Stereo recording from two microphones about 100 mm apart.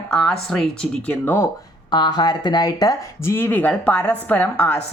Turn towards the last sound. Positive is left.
turn(degrees=10)  # may be behind; listen again after turning